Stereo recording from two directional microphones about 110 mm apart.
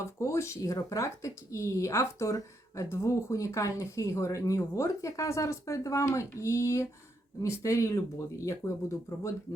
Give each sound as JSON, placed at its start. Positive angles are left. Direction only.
{"t": 0.0, "sound": "speech", "side_deg": 25}